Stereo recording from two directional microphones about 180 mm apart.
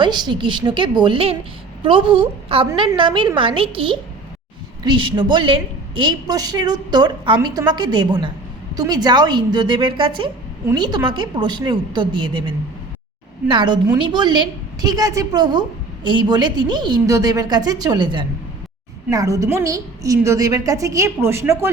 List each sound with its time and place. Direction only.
0.0 s a woman's voice: 25° right (ahead or behind)
13.5 s a woman's voice: 25° right (ahead or behind)